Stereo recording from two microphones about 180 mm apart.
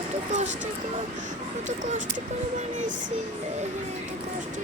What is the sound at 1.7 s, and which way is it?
Speech, 45° right (ahead or behind).